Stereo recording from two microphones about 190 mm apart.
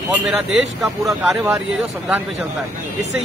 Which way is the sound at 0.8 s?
Centre (ahead or behind).